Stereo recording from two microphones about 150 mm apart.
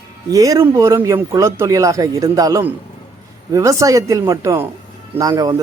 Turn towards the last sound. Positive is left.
turn(degrees=-25)  # may be behind; listen again after turning